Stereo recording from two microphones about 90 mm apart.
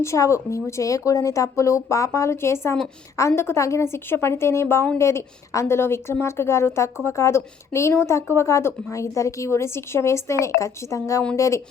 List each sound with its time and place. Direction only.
0.0 s a woman's voice: 35° left (ahead or behind)